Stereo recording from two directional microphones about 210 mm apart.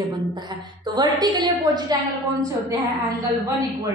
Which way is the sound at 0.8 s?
20° right (ahead or behind).